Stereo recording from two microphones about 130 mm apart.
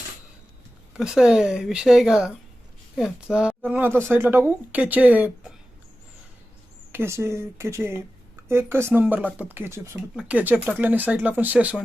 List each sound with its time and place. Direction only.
0.9 s speech: 5° right (ahead or behind)
6.9 s speech: 20° right (ahead or behind)